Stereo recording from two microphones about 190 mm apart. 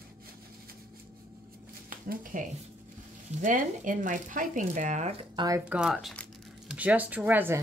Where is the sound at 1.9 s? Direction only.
45° right (ahead or behind).